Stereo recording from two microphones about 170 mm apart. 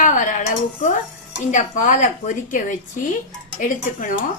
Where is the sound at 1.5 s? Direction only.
45° left (ahead or behind).